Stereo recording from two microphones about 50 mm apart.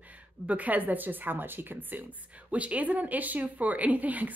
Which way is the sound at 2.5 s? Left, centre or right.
Right.